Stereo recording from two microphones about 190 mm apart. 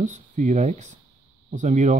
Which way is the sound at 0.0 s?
40° right (ahead or behind).